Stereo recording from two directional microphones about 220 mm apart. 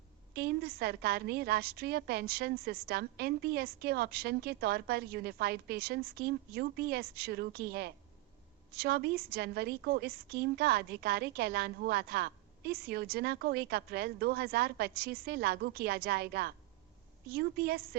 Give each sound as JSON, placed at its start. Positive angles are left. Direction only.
{"t": 0.3, "sound": "a woman's voice", "side_deg": -45}